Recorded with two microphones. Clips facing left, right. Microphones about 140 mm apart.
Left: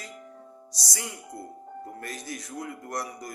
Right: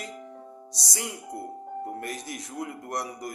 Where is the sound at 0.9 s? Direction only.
25° right (ahead or behind).